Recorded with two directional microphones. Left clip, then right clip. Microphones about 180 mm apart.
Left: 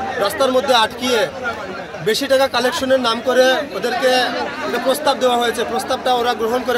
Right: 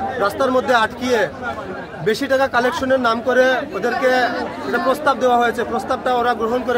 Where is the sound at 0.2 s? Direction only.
Centre (ahead or behind).